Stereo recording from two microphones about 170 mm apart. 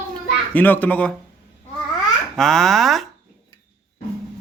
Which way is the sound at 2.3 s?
Centre (ahead or behind).